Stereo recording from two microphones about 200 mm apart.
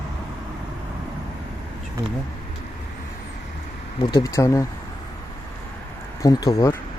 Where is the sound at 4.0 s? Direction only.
20° left (ahead or behind).